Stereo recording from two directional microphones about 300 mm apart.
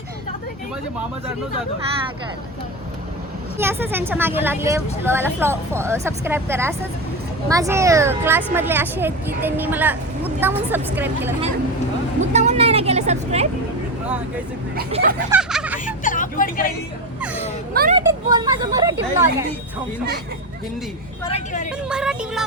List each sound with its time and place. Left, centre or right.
3.6 s speech: centre
12.2 s speech: right
14.8 s speech: right
15.3 s music: centre
15.9 s vehicle: left
17.9 s speech: centre
21.2 s a woman's voice: left
21.8 s speech: centre